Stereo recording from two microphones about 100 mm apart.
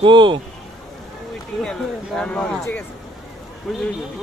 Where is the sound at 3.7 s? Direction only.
Centre (ahead or behind).